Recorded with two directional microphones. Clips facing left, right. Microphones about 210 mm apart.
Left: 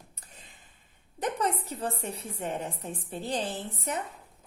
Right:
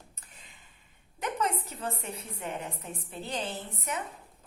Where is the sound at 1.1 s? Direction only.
35° left (ahead or behind).